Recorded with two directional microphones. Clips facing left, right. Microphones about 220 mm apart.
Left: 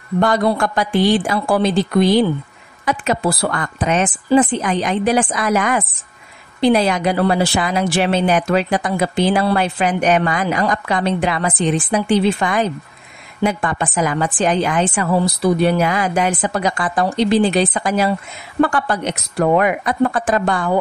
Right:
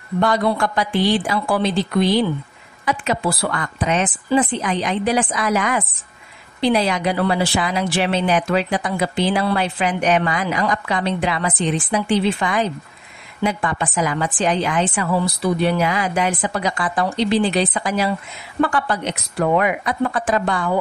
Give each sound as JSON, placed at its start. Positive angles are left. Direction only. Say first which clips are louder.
{"t": 0.2, "sound": "speech", "louder": "left 2 dB", "side_deg": 45}